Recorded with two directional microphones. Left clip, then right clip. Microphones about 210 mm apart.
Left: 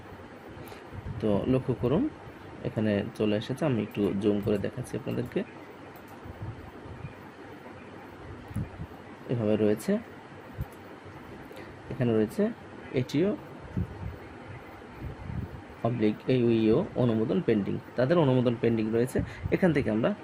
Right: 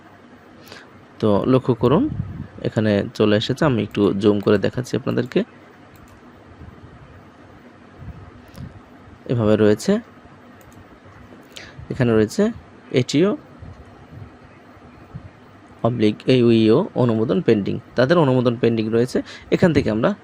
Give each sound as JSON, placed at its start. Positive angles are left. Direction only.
{"t": 1.2, "sound": "speech", "side_deg": -30}
{"t": 9.3, "sound": "speech", "side_deg": -30}
{"t": 11.5, "sound": "a sound", "side_deg": -25}
{"t": 12.9, "sound": "speech", "side_deg": -30}
{"t": 15.8, "sound": "speech", "side_deg": -30}